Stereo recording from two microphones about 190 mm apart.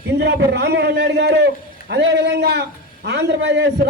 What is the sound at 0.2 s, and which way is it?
A man's voice, 60° right (ahead or behind).